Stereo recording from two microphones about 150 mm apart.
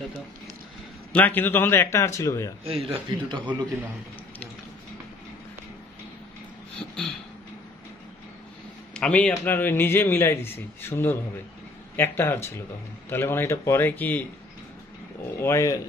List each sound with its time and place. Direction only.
1.1 s a man's voice: 10° left (ahead or behind)
2.6 s a man's voice: 40° right (ahead or behind)
8.9 s a man's voice: 5° left (ahead or behind)
15.3 s speech: 20° left (ahead or behind)